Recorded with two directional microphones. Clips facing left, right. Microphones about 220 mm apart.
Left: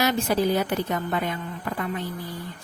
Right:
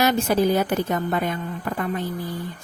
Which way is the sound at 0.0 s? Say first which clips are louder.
Right 3 dB; 50° right (ahead or behind).